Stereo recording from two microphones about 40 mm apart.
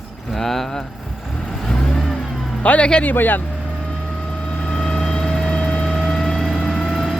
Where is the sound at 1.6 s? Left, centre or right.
Centre.